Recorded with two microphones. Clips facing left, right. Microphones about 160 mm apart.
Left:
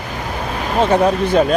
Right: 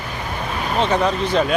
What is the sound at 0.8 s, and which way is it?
Speech, 50° left (ahead or behind).